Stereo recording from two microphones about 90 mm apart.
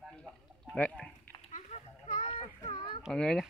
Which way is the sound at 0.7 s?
15° left (ahead or behind).